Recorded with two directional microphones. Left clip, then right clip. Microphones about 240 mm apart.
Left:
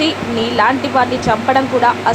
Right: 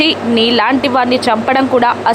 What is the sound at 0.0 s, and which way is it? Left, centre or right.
Speech, right.